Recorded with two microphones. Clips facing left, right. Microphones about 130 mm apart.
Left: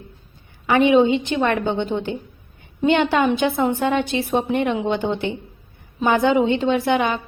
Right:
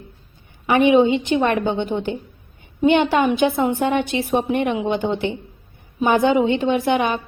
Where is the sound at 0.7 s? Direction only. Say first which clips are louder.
Right 1 dB; 15° right (ahead or behind).